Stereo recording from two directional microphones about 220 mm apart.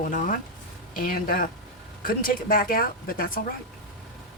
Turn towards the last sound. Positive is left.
turn(degrees=40)  # may be behind; listen again after turning